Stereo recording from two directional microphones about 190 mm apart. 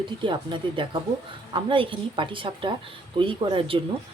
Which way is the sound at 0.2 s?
25° right (ahead or behind).